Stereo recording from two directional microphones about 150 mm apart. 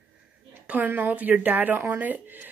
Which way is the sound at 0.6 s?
10° right (ahead or behind).